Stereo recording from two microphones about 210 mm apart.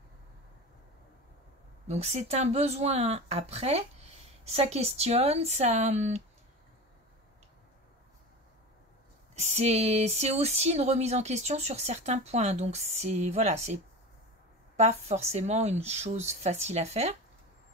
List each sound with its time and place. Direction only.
1.9 s speech: 30° right (ahead or behind)
9.3 s speech: 30° right (ahead or behind)
14.8 s speech: 30° right (ahead or behind)